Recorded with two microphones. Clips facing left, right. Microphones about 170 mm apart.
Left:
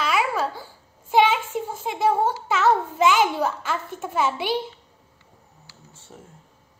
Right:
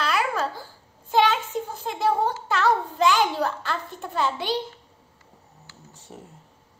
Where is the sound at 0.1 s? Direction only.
5° left (ahead or behind).